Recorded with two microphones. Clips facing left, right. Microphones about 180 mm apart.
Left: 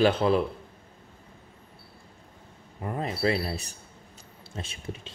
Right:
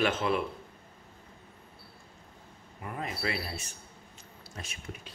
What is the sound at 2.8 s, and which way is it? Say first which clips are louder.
Speech: left 8 dB; 35° left (ahead or behind).